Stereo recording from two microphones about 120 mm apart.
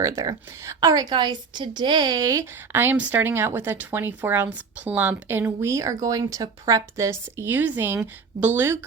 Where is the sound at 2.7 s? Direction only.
15° right (ahead or behind).